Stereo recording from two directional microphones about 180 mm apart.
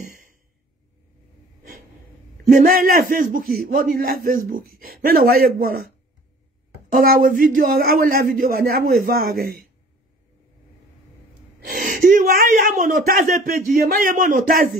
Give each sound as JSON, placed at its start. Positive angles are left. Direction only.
{"t": 0.0, "sound": "a sound", "side_deg": -55}
{"t": 2.5, "sound": "a man's voice", "side_deg": -55}
{"t": 6.9, "sound": "speech", "side_deg": -50}
{"t": 11.7, "sound": "speech", "side_deg": -50}